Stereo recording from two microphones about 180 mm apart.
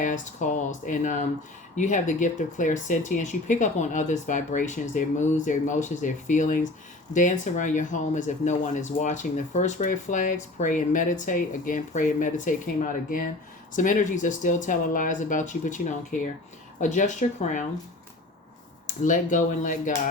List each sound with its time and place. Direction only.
0.0 s speech: 45° left (ahead or behind)
19.0 s speech: 45° left (ahead or behind)